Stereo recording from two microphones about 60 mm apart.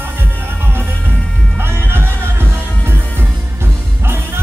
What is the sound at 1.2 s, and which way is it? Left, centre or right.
Music, centre.